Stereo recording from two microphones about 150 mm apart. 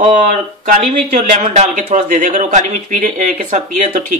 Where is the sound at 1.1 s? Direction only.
50° right (ahead or behind).